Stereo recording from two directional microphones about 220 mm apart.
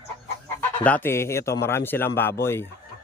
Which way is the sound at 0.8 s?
10° left (ahead or behind).